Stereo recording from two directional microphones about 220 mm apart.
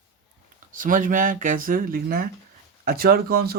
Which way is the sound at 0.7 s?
40° right (ahead or behind).